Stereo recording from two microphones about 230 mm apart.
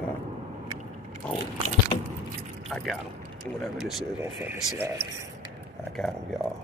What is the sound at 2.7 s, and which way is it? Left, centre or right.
Speech, centre.